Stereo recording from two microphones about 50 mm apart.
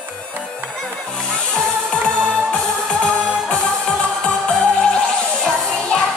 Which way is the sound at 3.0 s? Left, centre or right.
Left.